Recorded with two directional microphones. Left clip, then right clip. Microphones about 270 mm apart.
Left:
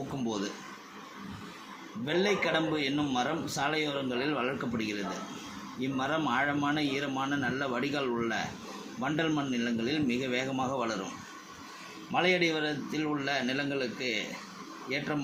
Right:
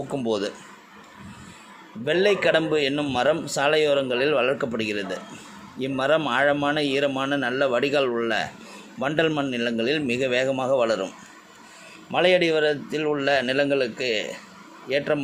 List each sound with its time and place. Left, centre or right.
2.0 s a man's voice: right
12.1 s a man's voice: right